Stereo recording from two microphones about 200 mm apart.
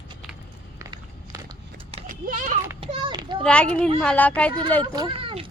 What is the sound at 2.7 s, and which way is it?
Children playing, 25° right (ahead or behind).